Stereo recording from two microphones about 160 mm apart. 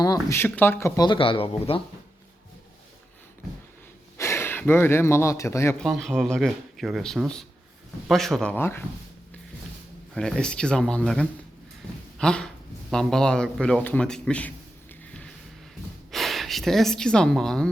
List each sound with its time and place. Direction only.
0.0 s speech: 20° left (ahead or behind)
4.2 s speech: 15° left (ahead or behind)
5.8 s speech: centre (ahead or behind)
10.2 s speech: 5° left (ahead or behind)
16.1 s speech: centre (ahead or behind)